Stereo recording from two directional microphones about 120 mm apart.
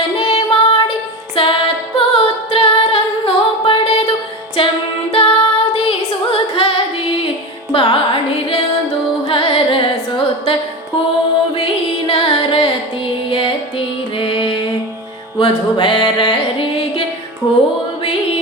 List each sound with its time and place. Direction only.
0.2 s music: 55° left (ahead or behind)
1.4 s a capella: 50° left (ahead or behind)
4.6 s music: 50° left (ahead or behind)
5.1 s singing: 55° left (ahead or behind)
7.7 s carnatic music: 50° left (ahead or behind)
9.2 s music: 50° left (ahead or behind)